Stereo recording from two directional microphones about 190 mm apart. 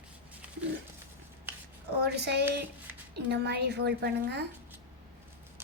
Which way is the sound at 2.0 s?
60° right (ahead or behind).